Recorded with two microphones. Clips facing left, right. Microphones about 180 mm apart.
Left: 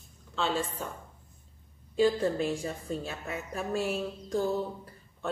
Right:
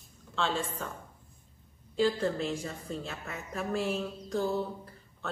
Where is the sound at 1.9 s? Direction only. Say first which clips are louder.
Left 3 dB; 15° left (ahead or behind).